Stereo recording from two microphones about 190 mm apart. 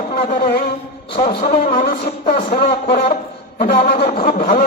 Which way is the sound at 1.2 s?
50° left (ahead or behind).